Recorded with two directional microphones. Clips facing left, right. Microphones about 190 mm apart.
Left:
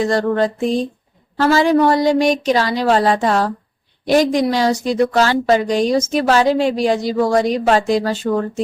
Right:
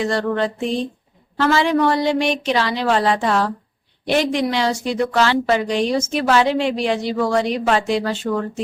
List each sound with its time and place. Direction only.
0.0 s a woman's voice: 40° left (ahead or behind)